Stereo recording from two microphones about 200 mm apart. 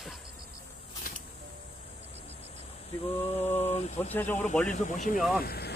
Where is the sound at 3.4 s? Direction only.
35° left (ahead or behind).